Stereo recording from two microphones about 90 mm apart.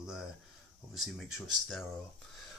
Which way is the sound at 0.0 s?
5° right (ahead or behind).